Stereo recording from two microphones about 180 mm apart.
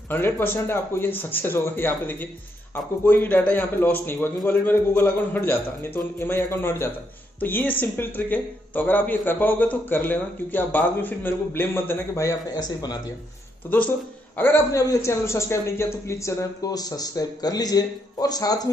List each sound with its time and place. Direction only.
0.1 s a man's voice: 10° left (ahead or behind)